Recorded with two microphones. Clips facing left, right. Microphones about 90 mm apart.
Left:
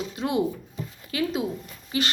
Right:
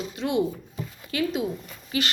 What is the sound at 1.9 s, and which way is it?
Speech, 30° left (ahead or behind).